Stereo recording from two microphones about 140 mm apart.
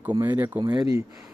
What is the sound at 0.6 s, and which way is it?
Speech, 25° right (ahead or behind).